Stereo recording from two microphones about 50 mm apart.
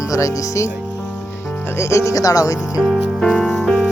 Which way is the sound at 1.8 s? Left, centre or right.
Left.